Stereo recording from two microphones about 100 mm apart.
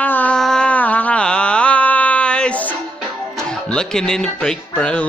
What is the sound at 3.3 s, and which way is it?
Speech, 5° left (ahead or behind).